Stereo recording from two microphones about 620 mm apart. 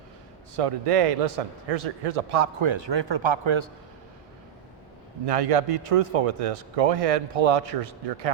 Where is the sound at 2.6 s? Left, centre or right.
Right.